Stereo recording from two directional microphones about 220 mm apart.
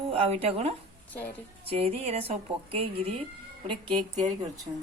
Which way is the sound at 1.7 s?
25° right (ahead or behind).